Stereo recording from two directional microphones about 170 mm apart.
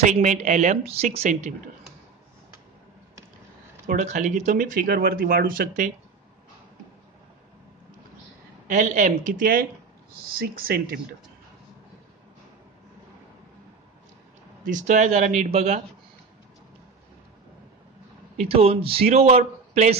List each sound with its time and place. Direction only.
0.0 s speech: 45° right (ahead or behind)
3.8 s speech: 45° right (ahead or behind)
8.6 s speech: 50° right (ahead or behind)
14.7 s speech: 45° right (ahead or behind)
18.4 s a man's voice: 35° right (ahead or behind)